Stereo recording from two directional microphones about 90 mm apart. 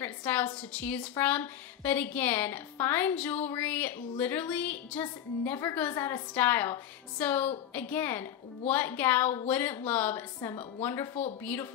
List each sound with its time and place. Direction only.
0.0 s a woman's voice: 20° left (ahead or behind)